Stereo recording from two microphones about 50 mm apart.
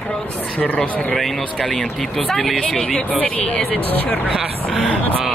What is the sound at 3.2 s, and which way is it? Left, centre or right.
Speech, left.